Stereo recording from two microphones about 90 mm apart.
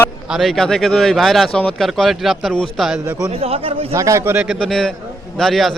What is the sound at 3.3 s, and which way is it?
Speech, 90° right.